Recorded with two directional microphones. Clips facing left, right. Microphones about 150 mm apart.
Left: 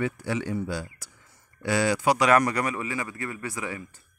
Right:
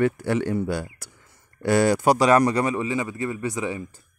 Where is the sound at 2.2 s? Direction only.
30° right (ahead or behind).